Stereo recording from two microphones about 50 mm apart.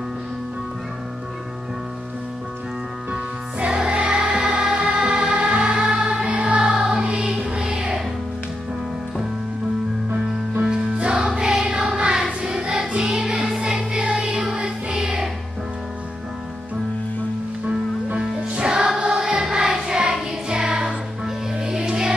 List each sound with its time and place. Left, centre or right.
3.1 s music: right
7.0 s music: right
7.4 s music: centre
10.6 s music: centre
18.2 s music: centre